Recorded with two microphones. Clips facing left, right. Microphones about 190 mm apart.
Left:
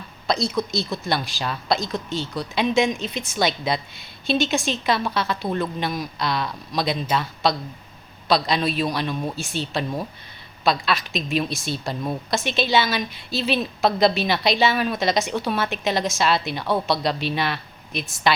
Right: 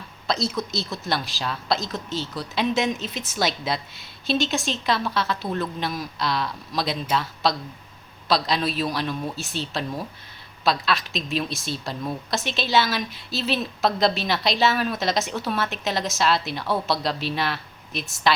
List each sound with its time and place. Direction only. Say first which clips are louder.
0.3 s a woman's voice: left 3 dB; centre (ahead or behind)